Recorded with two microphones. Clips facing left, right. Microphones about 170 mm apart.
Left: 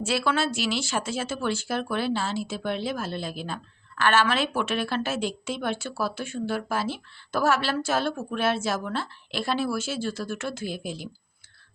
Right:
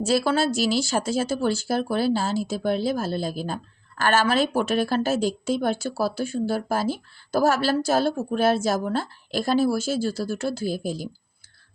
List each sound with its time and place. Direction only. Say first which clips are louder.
0.0 s speech: right 4 dB; 40° right (ahead or behind)